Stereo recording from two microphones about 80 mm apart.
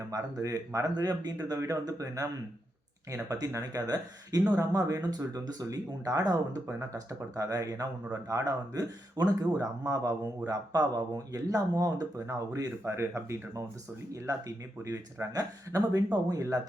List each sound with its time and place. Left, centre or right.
0.1 s speech: right
1.5 s speech: right
12.8 s speech: right
14.8 s speech: right